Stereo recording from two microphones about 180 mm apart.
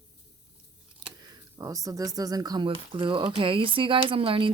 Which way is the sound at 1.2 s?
20° right (ahead or behind).